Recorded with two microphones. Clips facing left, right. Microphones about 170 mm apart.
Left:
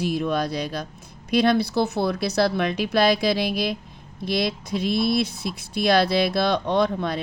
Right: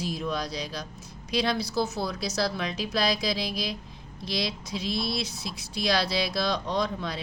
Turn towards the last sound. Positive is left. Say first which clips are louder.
# left 7 dB
turn(degrees=55)  # may be behind; listen again after turning